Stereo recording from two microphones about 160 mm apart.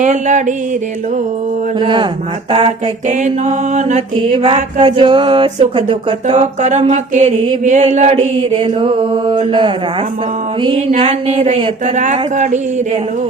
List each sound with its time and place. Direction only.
0.0 s mantra: 50° right (ahead or behind)
1.8 s mantra: 30° right (ahead or behind)
3.1 s mantra: 50° right (ahead or behind); by 6.3 s 30° right (ahead or behind)
6.3 s mantra: 45° right (ahead or behind); by 9.7 s 30° right (ahead or behind)
10.8 s mantra: 40° right (ahead or behind)